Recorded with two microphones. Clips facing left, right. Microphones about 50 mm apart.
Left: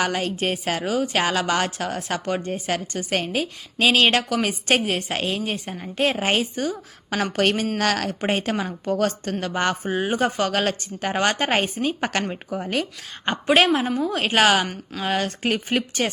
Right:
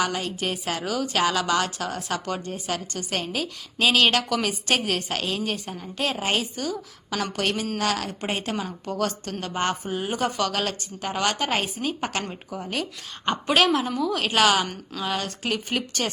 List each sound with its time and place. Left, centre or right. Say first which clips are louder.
0.0 s a woman's voice: left 3 dB; left
15.9 s speech: left 4 dB; left